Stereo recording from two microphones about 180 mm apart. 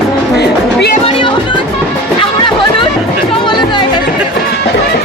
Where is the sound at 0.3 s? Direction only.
70° left (ahead or behind).